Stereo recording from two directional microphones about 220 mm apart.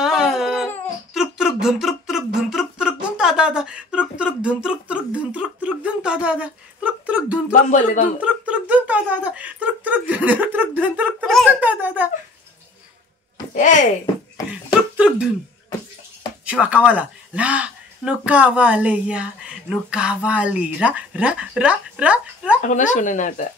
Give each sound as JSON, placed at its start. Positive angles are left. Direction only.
{"t": 0.0, "sound": "a sound", "side_deg": 0}
{"t": 7.7, "sound": "speech", "side_deg": 35}
{"t": 8.2, "sound": "speech", "side_deg": -5}
{"t": 13.6, "sound": "speech", "side_deg": 35}
{"t": 14.7, "sound": "a sound", "side_deg": -5}
{"t": 16.4, "sound": "speech", "side_deg": -5}
{"t": 22.6, "sound": "speech", "side_deg": 35}